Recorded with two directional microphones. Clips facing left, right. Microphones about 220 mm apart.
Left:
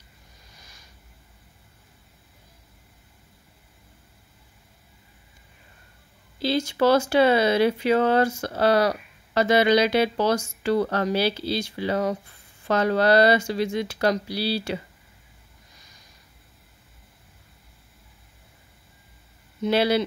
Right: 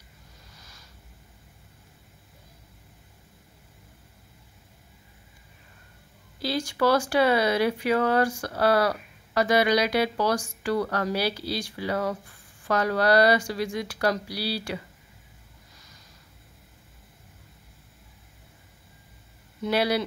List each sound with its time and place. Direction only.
0.6 s a sound: 15° left (ahead or behind)
6.4 s speech: 25° left (ahead or behind)
19.6 s speech: 25° left (ahead or behind)